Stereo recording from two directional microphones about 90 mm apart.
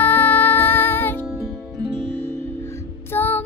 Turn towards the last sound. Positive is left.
turn(degrees=20)  # may be behind; listen again after turning